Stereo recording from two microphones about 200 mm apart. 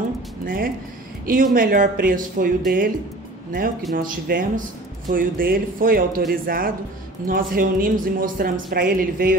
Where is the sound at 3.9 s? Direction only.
45° right (ahead or behind).